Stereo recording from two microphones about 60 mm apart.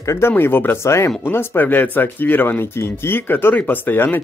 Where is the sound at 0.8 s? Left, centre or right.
Left.